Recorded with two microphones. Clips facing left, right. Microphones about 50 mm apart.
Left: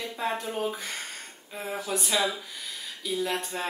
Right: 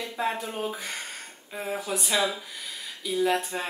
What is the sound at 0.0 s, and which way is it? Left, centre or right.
Speech, centre.